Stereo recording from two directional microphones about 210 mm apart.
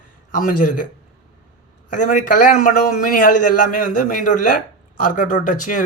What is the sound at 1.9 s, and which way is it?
A man's voice, 40° left (ahead or behind).